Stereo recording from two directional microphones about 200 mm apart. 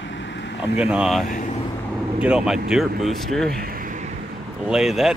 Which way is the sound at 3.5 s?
50° right (ahead or behind).